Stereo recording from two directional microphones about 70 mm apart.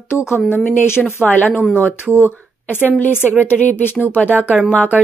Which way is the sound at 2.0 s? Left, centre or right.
Right.